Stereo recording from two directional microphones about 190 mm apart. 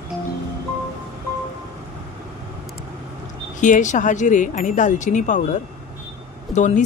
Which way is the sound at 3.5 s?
40° left (ahead or behind).